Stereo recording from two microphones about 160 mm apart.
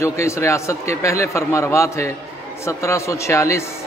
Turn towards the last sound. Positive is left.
turn(degrees=20)  # may be behind; listen again after turning